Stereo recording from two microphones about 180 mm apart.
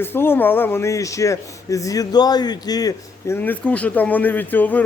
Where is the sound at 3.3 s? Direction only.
10° left (ahead or behind).